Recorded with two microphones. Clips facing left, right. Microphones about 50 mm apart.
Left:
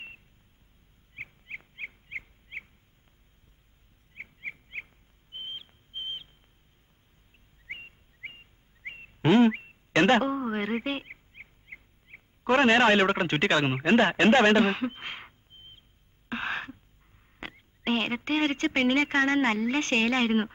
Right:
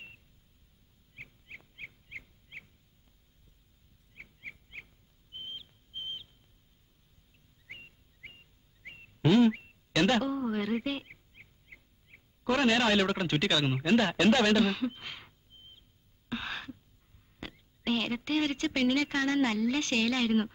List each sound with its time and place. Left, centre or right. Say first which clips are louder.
1.1 s bird: left 7 dB; left
4.1 s bird: left 7 dB; left
7.6 s a sound: left 7 dB; left
17.4 s speech: left 3 dB; left